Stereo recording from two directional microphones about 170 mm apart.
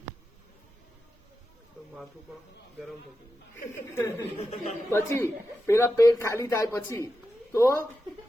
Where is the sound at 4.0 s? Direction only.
15° left (ahead or behind).